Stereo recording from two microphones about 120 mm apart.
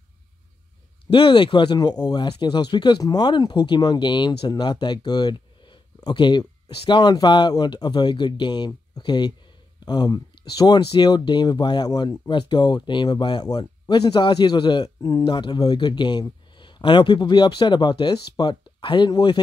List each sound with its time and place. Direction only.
1.1 s speech: 45° left (ahead or behind)